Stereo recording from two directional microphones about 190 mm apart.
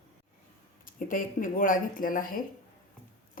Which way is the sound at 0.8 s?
45° left (ahead or behind).